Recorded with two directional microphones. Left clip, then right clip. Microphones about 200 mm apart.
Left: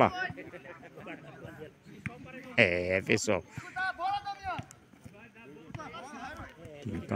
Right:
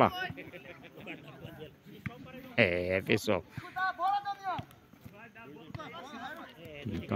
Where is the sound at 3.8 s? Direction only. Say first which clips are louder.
Right 2 dB; 25° left (ahead or behind).